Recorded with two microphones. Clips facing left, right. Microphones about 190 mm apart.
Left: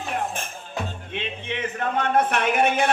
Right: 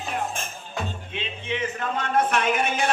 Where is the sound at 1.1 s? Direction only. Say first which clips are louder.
Left 2 dB; 60° left (ahead or behind).